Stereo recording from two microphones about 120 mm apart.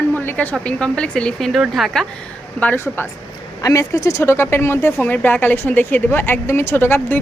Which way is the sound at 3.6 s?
25° left (ahead or behind).